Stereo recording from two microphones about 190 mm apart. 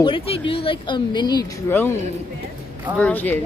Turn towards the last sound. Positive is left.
turn(degrees=10)  # may be behind; listen again after turning